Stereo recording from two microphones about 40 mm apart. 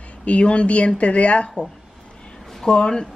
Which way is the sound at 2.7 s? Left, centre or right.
Left.